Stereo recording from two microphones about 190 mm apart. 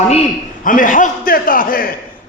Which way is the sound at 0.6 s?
45° left (ahead or behind).